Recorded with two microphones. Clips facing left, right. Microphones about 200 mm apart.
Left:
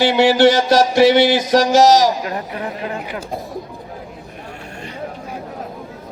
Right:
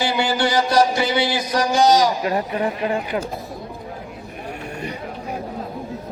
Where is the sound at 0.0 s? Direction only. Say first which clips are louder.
Left 9 dB; 70° left (ahead or behind).